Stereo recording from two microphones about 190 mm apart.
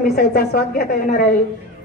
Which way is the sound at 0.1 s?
55° left (ahead or behind).